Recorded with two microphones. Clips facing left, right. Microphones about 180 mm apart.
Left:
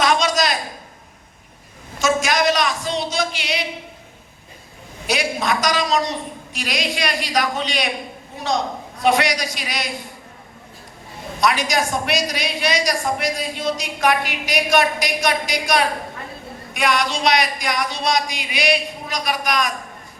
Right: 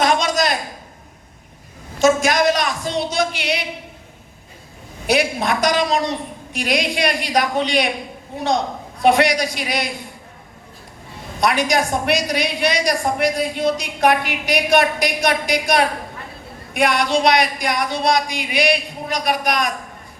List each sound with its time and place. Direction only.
0.0 s a sound: 55° right (ahead or behind)
2.0 s a man's voice: 55° right (ahead or behind)
5.0 s a woman's voice: 60° right (ahead or behind)
9.0 s a woman's voice: 55° right (ahead or behind)
11.3 s a woman's voice: 60° right (ahead or behind)